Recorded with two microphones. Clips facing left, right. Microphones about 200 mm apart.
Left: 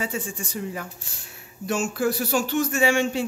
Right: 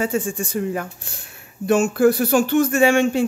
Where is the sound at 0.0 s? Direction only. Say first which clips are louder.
Right 8 dB; 50° right (ahead or behind).